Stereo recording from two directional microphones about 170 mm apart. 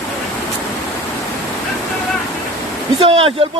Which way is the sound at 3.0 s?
35° right (ahead or behind).